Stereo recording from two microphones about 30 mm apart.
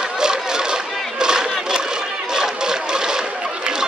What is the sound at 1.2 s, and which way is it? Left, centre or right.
Crowd, right.